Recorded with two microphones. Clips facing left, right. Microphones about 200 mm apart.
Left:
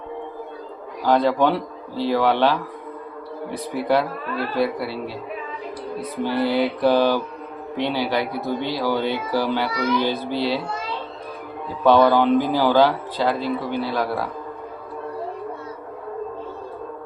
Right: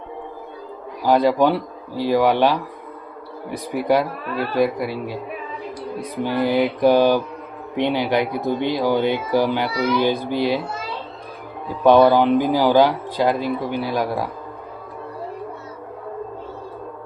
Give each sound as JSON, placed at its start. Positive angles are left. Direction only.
{"t": 1.0, "sound": "speech", "side_deg": -10}
{"t": 6.2, "sound": "speech", "side_deg": -15}
{"t": 11.8, "sound": "speech", "side_deg": -15}